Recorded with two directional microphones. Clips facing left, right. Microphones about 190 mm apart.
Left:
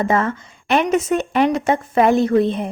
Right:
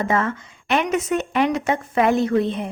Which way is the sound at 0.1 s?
35° left (ahead or behind).